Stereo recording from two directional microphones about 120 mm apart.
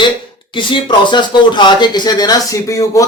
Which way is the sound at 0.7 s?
40° left (ahead or behind).